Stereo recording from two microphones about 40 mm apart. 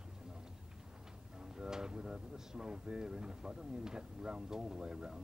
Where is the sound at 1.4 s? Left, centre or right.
Centre.